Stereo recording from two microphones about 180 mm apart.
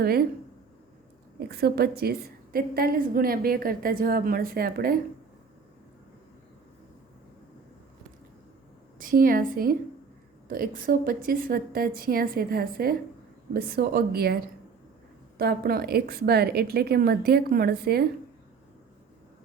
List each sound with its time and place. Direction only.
0.0 s a woman's voice: 60° right (ahead or behind)
1.4 s a woman's voice: 60° right (ahead or behind)
9.0 s a woman's voice: 50° right (ahead or behind)
15.4 s a woman's voice: 55° right (ahead or behind)